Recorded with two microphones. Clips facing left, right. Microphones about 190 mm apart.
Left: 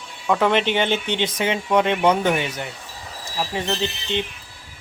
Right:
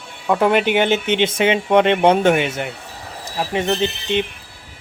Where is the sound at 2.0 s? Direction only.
25° right (ahead or behind).